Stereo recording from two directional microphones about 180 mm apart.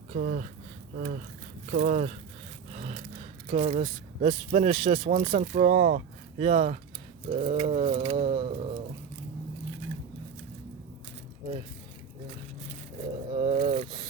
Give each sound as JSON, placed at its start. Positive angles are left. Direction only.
{"t": 0.1, "sound": "speech", "side_deg": -45}
{"t": 3.2, "sound": "speech", "side_deg": -35}
{"t": 13.3, "sound": "speech", "side_deg": -30}